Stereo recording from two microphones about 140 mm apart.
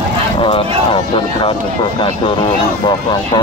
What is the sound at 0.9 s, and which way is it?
Speech, 40° left (ahead or behind).